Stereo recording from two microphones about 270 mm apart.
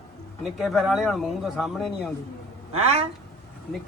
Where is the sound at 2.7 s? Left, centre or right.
Right.